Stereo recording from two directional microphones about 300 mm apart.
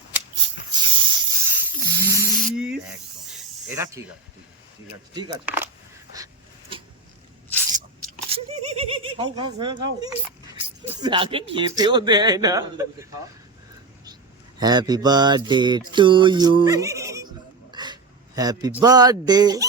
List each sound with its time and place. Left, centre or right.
0.1 s a sound: centre
2.4 s snake: centre
5.1 s speech: centre
8.3 s a sound: centre
11.0 s speech: centre
14.6 s mantra: centre
18.8 s speech: centre